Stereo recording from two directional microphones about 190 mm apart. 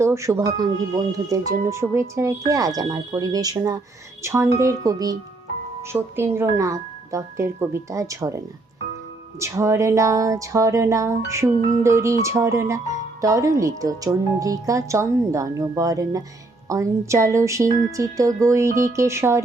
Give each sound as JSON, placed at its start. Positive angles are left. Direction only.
{"t": 0.0, "sound": "speech", "side_deg": -15}
{"t": 9.4, "sound": "speech", "side_deg": -15}